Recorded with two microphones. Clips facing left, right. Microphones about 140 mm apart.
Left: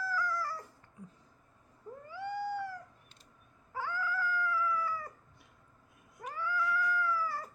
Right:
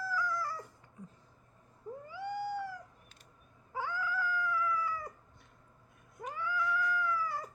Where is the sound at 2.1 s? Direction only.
15° right (ahead or behind).